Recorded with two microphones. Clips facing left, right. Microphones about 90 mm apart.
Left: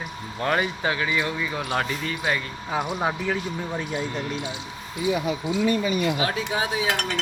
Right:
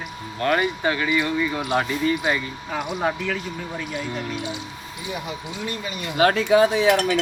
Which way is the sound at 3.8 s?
25° left (ahead or behind).